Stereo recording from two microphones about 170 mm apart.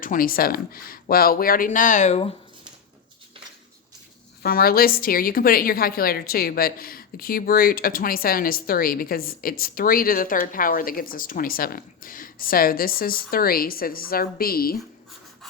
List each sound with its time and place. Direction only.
0.0 s a woman's voice: 55° left (ahead or behind); by 2.3 s 40° left (ahead or behind)
4.4 s a woman's voice: 60° left (ahead or behind)